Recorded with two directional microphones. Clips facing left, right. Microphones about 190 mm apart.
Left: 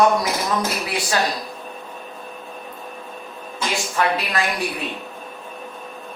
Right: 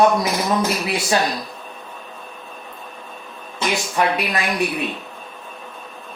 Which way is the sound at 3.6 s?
20° right (ahead or behind).